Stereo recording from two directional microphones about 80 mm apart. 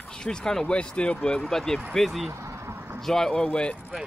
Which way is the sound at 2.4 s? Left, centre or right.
Right.